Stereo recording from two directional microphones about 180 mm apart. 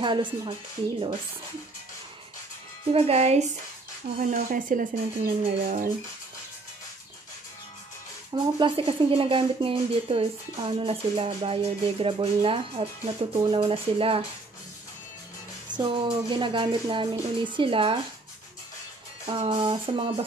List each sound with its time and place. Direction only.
0.0 s speech: 25° right (ahead or behind)
2.9 s speech: 35° right (ahead or behind)
4.2 s speech: 55° right (ahead or behind)
8.5 s speech: 30° right (ahead or behind)
15.7 s speech: 25° right (ahead or behind)
19.2 s speech: 25° right (ahead or behind)